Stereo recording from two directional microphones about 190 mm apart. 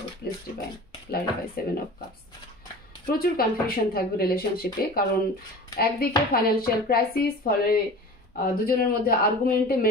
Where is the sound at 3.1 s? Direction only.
50° left (ahead or behind).